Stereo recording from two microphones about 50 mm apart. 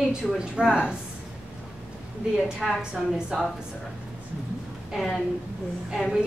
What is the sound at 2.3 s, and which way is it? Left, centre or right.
Speech, centre.